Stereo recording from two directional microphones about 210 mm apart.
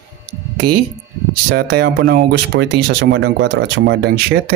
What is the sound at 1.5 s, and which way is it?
Speech, 45° right (ahead or behind).